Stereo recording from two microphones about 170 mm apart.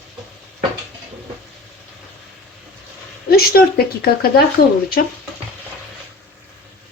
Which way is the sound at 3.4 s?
65° left (ahead or behind).